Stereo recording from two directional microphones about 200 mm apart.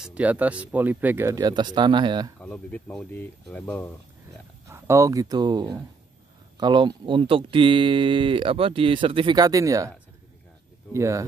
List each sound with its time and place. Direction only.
0.0 s speech: 5° right (ahead or behind); by 2.3 s 20° right (ahead or behind)
2.4 s speech: 5° left (ahead or behind)
4.6 s speech: 15° right (ahead or behind)